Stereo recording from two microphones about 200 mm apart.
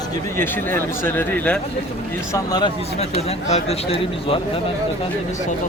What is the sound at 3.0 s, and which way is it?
Speech, 30° left (ahead or behind).